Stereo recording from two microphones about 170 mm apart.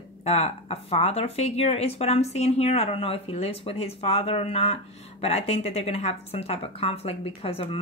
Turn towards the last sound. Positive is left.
turn(degrees=35)  # may be behind; listen again after turning